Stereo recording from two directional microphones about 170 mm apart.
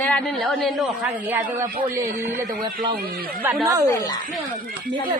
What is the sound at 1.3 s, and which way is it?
Speech, 10° right (ahead or behind).